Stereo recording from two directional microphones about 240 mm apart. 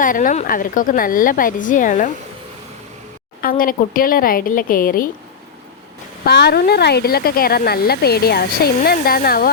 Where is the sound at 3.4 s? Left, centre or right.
Left.